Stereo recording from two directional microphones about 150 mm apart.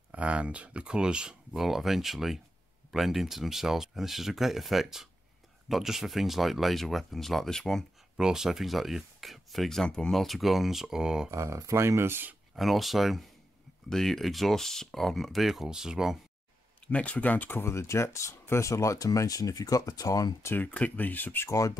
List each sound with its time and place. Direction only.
0.1 s speech: 10° right (ahead or behind)
11.2 s speech: 20° right (ahead or behind)
12.5 s speech: centre (ahead or behind)
16.8 s speech: 10° left (ahead or behind)
20.5 s speech: 10° left (ahead or behind)